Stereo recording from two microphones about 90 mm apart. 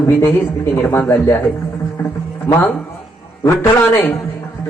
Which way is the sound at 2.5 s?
20° left (ahead or behind).